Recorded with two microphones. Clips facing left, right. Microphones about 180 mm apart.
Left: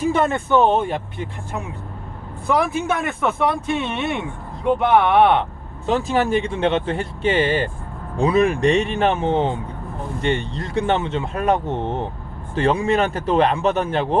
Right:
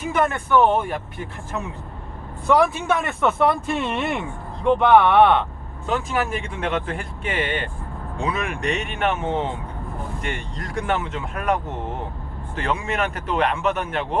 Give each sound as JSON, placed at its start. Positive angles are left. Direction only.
{"t": 0.0, "sound": "speech", "side_deg": 30}
{"t": 3.2, "sound": "speech", "side_deg": 0}
{"t": 4.6, "sound": "speech", "side_deg": 10}
{"t": 5.8, "sound": "speech", "side_deg": 30}